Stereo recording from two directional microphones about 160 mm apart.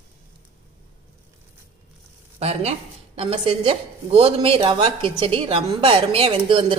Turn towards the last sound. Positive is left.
turn(degrees=-35)  # may be behind; listen again after turning